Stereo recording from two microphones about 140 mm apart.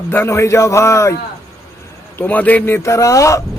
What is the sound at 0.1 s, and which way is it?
Speech, 20° left (ahead or behind).